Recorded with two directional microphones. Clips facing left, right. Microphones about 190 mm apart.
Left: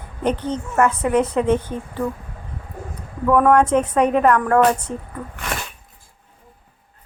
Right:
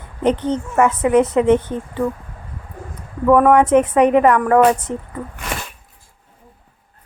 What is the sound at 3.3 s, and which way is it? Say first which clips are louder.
A woman's voice: right 3 dB; 10° right (ahead or behind).